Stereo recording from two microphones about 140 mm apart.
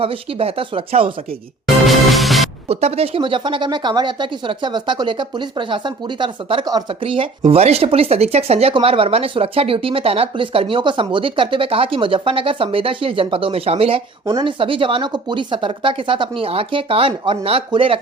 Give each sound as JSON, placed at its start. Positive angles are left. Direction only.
{"t": 0.0, "sound": "speech", "side_deg": -40}
{"t": 1.6, "sound": "music", "side_deg": 0}
{"t": 2.6, "sound": "speech", "side_deg": -45}
{"t": 14.3, "sound": "speech", "side_deg": -30}